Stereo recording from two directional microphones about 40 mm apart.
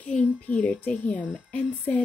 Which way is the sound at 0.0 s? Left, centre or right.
Left.